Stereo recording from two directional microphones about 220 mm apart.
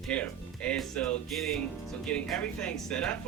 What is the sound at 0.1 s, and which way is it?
Speech, 5° left (ahead or behind).